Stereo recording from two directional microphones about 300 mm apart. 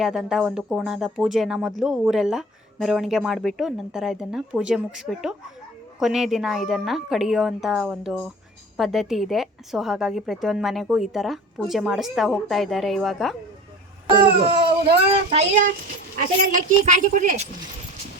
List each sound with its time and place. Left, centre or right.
0.0 s a woman's voice: centre
14.9 s a woman's voice: centre